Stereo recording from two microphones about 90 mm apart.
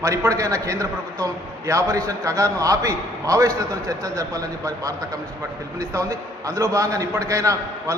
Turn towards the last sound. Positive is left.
turn(degrees=-35)  # may be behind; listen again after turning